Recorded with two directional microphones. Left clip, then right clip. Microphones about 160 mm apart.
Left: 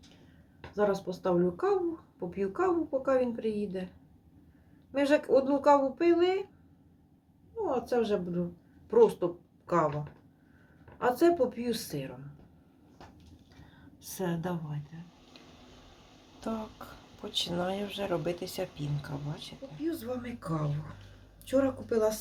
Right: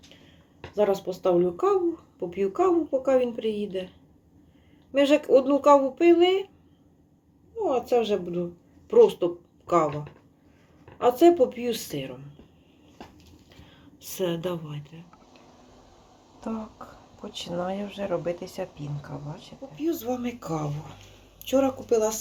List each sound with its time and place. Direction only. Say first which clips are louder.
0.7 s speech: right 5 dB; 10° left (ahead or behind)
4.9 s speech: right 6 dB; 10° left (ahead or behind)
7.6 s speech: right 6 dB; 10° left (ahead or behind)
11.0 s speech: right 7 dB; 10° left (ahead or behind)
14.0 s speech: right 7 dB; 15° left (ahead or behind)
16.4 s speech: right 2 dB; 10° right (ahead or behind)
21.5 s speech: right 5 dB; 5° left (ahead or behind)